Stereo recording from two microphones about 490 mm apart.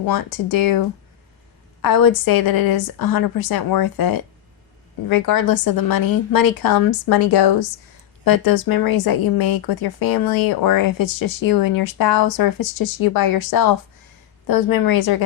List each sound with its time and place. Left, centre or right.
0.1 s speech: left